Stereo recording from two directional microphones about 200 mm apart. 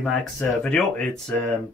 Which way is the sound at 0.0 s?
5° left (ahead or behind).